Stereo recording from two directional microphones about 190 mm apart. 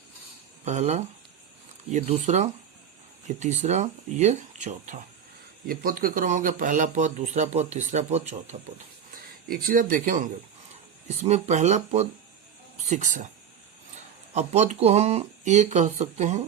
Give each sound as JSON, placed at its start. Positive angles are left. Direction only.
{"t": 0.6, "sound": "speech", "side_deg": -40}
{"t": 5.6, "sound": "speech", "side_deg": -50}
{"t": 9.5, "sound": "speech", "side_deg": -50}
{"t": 14.3, "sound": "speech", "side_deg": -35}